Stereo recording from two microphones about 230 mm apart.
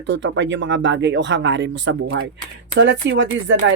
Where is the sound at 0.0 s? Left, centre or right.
Right.